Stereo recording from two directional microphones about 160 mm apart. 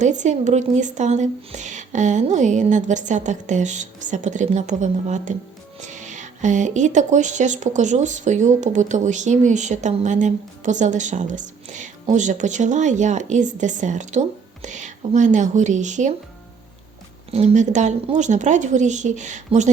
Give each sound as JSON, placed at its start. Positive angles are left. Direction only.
{"t": 0.0, "sound": "speech", "side_deg": -50}
{"t": 17.3, "sound": "speech", "side_deg": -45}